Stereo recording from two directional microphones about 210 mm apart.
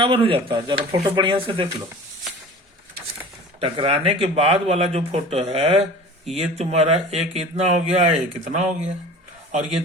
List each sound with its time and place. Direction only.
0.0 s speech: 25° right (ahead or behind)
3.6 s speech: 25° right (ahead or behind)